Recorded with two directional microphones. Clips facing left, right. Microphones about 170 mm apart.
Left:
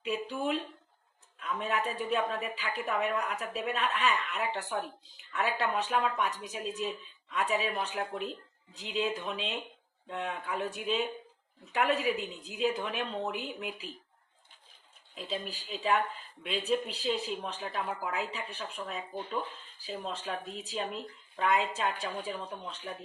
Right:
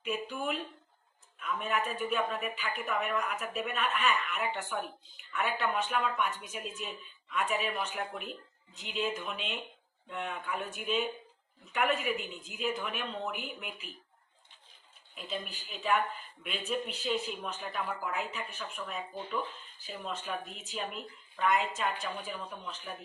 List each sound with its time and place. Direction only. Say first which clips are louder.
0.0 s a woman's voice: left 2 dB; 30° left (ahead or behind)
15.1 s a woman's voice: left 2 dB; 35° left (ahead or behind)